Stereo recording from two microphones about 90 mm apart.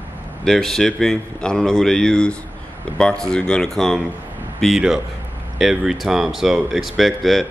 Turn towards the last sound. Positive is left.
turn(degrees=0)  # may be behind; listen again after turning